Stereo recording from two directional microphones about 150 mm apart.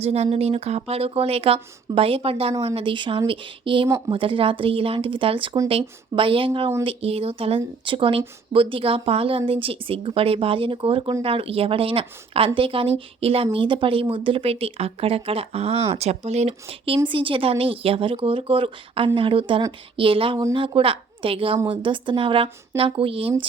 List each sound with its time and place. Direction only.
0.0 s speech: 45° right (ahead or behind)